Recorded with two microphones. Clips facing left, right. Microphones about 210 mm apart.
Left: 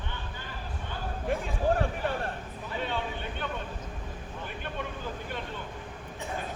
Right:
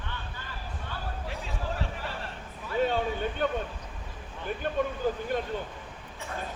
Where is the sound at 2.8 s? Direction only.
45° right (ahead or behind).